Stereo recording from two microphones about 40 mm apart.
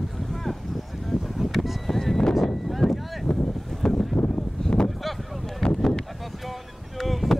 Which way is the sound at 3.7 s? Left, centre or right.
Centre.